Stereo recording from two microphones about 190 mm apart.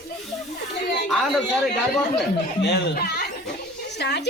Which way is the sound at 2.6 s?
60° left (ahead or behind).